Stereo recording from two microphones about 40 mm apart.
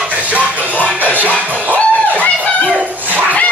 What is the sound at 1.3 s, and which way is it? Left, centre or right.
Music, right.